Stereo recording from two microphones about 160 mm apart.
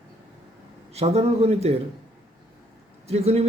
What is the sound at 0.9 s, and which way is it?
Speech, 40° right (ahead or behind).